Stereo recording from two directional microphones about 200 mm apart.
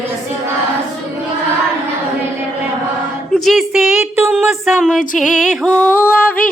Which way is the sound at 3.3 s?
Centre (ahead or behind).